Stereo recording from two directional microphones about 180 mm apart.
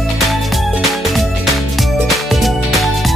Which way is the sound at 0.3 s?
Centre (ahead or behind).